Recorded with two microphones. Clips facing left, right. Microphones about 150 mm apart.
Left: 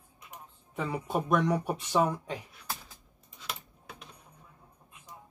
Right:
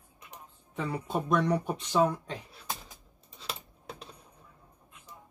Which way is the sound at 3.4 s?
30° right (ahead or behind).